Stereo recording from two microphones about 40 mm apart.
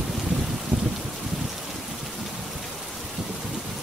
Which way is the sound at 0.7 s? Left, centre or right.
Right.